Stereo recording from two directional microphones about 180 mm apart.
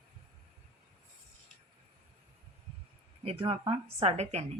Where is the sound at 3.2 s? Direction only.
30° right (ahead or behind).